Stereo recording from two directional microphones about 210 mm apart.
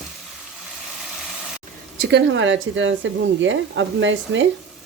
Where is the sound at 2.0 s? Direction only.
55° right (ahead or behind).